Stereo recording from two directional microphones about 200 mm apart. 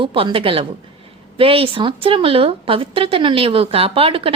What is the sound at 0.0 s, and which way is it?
Speech, 25° right (ahead or behind).